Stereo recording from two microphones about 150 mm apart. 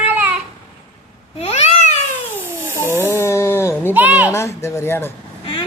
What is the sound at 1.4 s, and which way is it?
Babbling, 45° left (ahead or behind).